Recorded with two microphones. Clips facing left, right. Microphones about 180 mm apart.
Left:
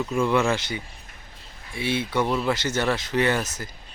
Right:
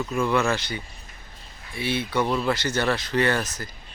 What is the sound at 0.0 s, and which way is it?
Speech, 15° left (ahead or behind).